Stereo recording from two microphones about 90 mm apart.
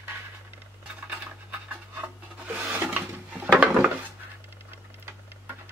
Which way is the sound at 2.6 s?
20° right (ahead or behind).